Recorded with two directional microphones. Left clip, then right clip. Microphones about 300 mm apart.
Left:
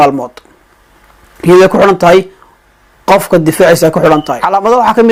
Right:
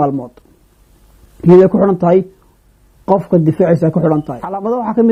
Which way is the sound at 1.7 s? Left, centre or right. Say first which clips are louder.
Left 6 dB; centre.